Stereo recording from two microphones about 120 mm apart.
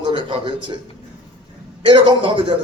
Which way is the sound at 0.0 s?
45° right (ahead or behind).